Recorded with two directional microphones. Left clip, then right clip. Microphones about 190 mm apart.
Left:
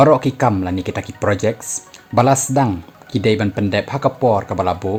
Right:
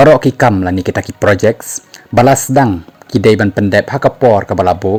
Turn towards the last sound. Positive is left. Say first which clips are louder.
# right 7 dB
turn(degrees=-40)  # may be behind; listen again after turning